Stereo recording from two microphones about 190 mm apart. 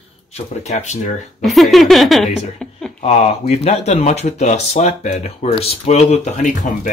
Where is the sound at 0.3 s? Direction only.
35° left (ahead or behind).